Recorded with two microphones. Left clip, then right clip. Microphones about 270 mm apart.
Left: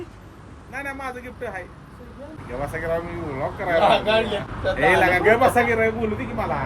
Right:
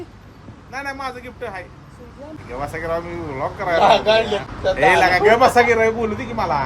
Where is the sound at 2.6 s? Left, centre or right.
Centre.